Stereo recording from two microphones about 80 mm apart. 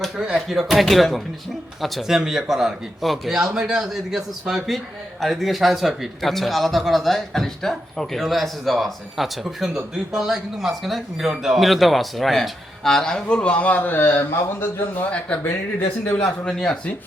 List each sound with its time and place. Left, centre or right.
0.3 s speech: centre; by 15.0 s left
16.0 s speech: centre